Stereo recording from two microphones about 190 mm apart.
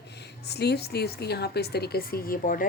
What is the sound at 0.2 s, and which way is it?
A woman's voice, 60° left (ahead or behind).